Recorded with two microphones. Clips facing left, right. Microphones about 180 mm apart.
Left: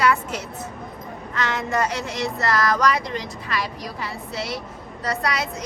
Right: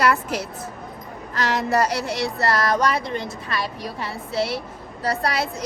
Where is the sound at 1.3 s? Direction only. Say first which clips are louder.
Right 3 dB; 35° right (ahead or behind).